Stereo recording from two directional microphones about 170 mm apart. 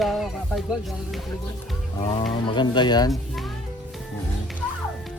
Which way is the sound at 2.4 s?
30° left (ahead or behind).